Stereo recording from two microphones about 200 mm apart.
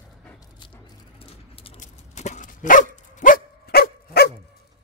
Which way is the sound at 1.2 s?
30° left (ahead or behind).